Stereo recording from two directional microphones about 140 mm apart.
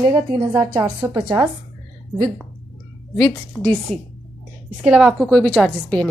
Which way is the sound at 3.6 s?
5° left (ahead or behind).